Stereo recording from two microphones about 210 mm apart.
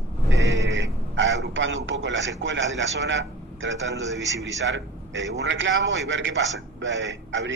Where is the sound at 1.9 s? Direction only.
60° right (ahead or behind).